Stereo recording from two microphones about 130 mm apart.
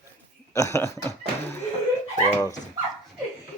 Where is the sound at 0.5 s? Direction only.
20° left (ahead or behind).